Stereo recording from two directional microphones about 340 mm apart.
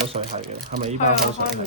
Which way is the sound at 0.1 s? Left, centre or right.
Centre.